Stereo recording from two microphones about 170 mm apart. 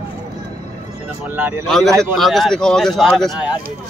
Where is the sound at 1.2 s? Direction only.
10° right (ahead or behind).